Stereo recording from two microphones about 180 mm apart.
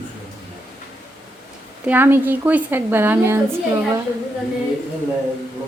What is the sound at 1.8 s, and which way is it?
Speech, 10° right (ahead or behind).